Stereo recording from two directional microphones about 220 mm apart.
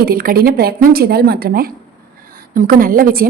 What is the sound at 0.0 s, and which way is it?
A woman's voice, 40° right (ahead or behind).